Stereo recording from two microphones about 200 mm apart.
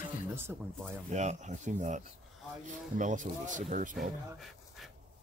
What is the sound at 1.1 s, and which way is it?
Speech, 35° right (ahead or behind).